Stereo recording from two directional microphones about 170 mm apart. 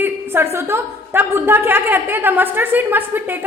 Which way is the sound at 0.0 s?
15° right (ahead or behind).